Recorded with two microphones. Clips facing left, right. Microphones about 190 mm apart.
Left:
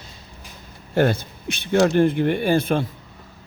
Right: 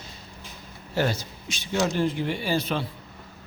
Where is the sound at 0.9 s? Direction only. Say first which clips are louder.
Left 7 dB; 55° left (ahead or behind).